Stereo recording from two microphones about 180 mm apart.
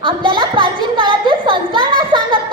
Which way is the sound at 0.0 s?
25° right (ahead or behind).